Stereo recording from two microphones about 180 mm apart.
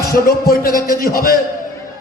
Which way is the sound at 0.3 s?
55° left (ahead or behind).